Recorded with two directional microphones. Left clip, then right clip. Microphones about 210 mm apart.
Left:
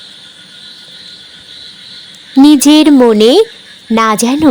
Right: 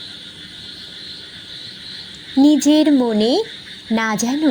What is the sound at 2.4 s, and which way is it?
Speech, 30° left (ahead or behind).